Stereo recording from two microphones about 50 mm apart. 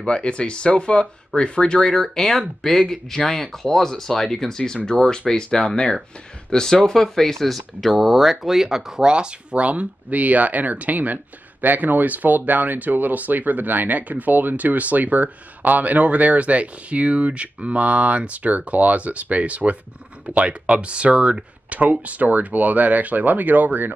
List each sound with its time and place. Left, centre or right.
0.0 s speech: centre
2.0 s speech: centre
9.1 s speech: right